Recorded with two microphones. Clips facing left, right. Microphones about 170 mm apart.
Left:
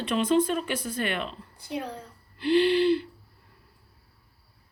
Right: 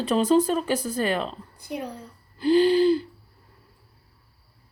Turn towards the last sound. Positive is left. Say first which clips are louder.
# right 3 dB
turn(degrees=-35)  # may be behind; listen again after turning